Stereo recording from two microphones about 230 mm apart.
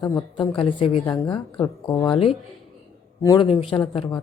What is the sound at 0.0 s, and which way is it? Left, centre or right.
A woman's voice, centre.